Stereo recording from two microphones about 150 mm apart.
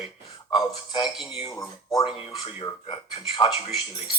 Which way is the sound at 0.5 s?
30° left (ahead or behind).